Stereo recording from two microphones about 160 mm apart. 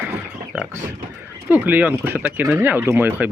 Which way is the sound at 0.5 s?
10° right (ahead or behind).